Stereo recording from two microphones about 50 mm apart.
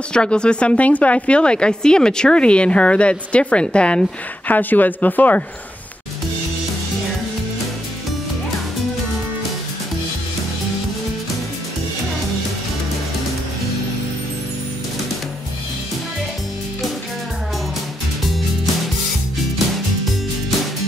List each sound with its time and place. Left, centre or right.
0.1 s a woman's voice: centre
4.5 s speech: left